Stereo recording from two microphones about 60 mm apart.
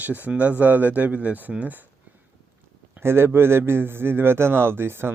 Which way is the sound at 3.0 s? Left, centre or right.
Right.